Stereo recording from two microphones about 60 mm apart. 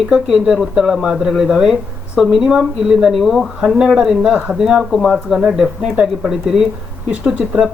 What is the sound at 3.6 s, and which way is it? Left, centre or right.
Speech, centre.